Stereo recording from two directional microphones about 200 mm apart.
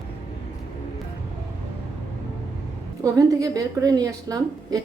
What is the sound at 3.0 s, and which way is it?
A woman's voice, 15° right (ahead or behind).